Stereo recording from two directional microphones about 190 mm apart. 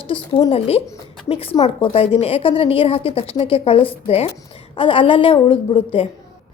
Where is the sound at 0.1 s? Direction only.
25° left (ahead or behind).